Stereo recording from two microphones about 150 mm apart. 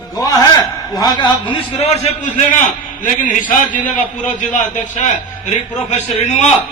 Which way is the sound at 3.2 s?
60° left (ahead or behind).